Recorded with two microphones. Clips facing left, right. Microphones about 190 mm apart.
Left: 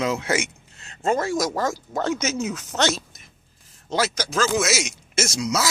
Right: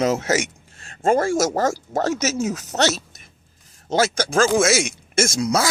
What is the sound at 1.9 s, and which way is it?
Speech, 40° right (ahead or behind).